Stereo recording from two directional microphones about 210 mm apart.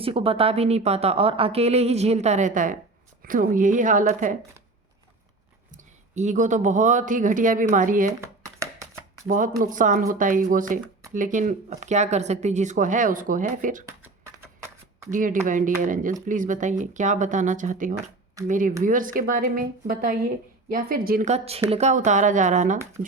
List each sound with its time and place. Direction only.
0.0 s speech: 25° right (ahead or behind)
5.7 s speech: 35° right (ahead or behind)
8.2 s a sound: 15° right (ahead or behind)
9.2 s speech: 40° right (ahead or behind)
15.1 s speech: 40° right (ahead or behind)